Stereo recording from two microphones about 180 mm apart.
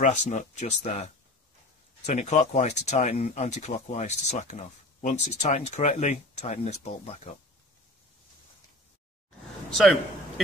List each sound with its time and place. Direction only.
0.0 s speech: 40° left (ahead or behind)
9.8 s a man's voice: centre (ahead or behind)